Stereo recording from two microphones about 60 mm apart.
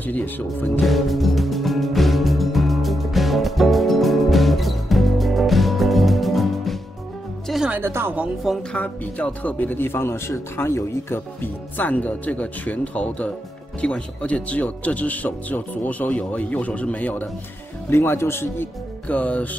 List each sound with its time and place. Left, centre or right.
0.0 s speech: left
0.7 s music: centre
8.7 s speech: left
17.8 s speech: left
19.0 s speech: left